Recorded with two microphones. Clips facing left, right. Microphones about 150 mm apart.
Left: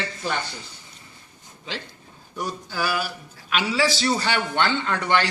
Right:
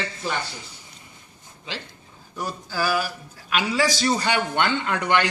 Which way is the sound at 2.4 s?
5° right (ahead or behind).